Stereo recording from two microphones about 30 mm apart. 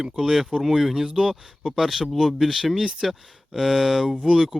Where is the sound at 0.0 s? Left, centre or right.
Centre.